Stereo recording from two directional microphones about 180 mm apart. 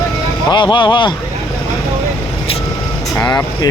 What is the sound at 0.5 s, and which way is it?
Speech, 25° left (ahead or behind).